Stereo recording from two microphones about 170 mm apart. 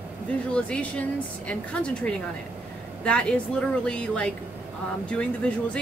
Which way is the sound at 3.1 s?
5° left (ahead or behind).